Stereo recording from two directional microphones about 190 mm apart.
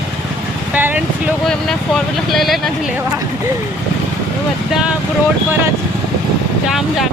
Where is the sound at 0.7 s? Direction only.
10° right (ahead or behind).